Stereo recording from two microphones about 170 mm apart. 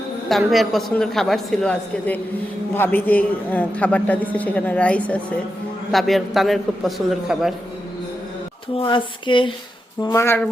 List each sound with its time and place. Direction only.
0.3 s a woman's voice: centre (ahead or behind)
8.7 s a sound: 30° left (ahead or behind)
10.0 s a man's voice: 20° left (ahead or behind)